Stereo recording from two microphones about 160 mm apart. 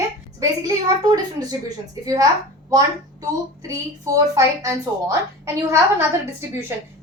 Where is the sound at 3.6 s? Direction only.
20° right (ahead or behind).